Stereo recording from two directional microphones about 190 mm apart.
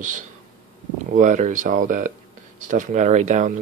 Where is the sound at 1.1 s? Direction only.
40° right (ahead or behind).